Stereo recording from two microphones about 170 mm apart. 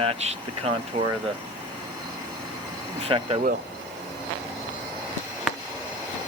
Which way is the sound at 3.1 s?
30° right (ahead or behind).